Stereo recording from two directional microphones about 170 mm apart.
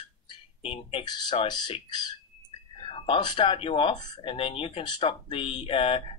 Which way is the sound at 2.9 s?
30° left (ahead or behind).